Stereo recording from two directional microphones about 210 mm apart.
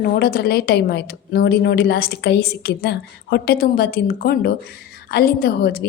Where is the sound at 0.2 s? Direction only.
45° left (ahead or behind).